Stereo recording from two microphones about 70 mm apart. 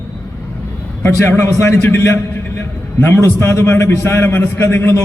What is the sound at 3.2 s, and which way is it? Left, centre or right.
A man's voice, left.